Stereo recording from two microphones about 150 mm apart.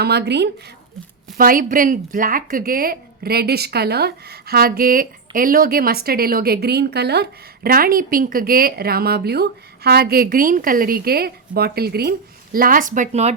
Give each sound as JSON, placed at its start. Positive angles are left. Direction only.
{"t": 0.0, "sound": "speech", "side_deg": -90}
{"t": 1.4, "sound": "speech", "side_deg": -70}
{"t": 12.5, "sound": "speech", "side_deg": -70}